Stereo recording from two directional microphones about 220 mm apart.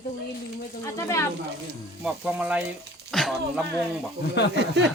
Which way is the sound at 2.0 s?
5° right (ahead or behind).